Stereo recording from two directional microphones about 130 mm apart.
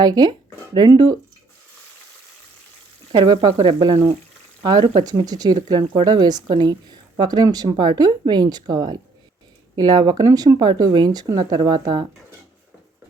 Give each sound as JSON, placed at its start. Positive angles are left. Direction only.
{"t": 0.0, "sound": "speech", "side_deg": -30}
{"t": 3.1, "sound": "speech", "side_deg": -35}